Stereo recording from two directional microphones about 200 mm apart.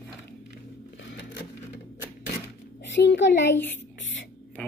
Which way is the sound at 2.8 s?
60° left (ahead or behind).